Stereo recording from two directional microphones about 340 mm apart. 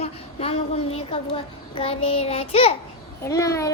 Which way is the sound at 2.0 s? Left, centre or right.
Centre.